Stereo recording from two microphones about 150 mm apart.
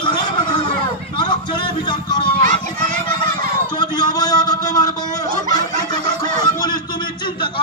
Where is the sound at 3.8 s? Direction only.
25° left (ahead or behind).